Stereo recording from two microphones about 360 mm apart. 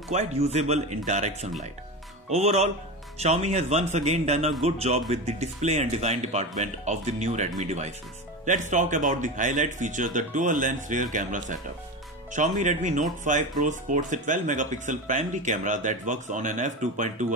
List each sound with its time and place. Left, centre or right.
0.1 s speech: centre